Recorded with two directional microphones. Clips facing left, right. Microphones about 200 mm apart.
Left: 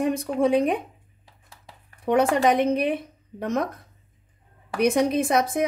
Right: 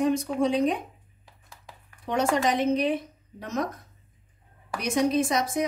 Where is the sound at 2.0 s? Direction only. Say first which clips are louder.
Left 5 dB; 60° left (ahead or behind).